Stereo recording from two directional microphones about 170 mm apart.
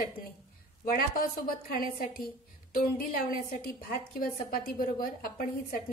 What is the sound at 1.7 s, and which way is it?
A woman's voice, 60° left (ahead or behind).